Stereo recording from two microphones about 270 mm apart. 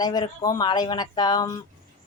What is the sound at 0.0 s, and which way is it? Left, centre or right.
Speech, centre.